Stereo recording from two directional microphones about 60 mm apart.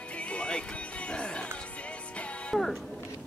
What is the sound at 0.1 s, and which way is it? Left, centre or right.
Music, left.